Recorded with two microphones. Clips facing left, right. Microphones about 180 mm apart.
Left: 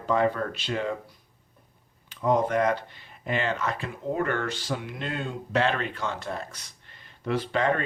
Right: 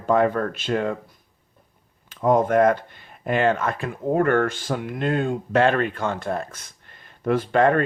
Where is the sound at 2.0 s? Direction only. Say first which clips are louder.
Right 5 dB; 50° right (ahead or behind).